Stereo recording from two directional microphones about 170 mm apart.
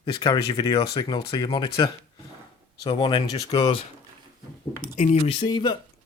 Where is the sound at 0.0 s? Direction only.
25° left (ahead or behind).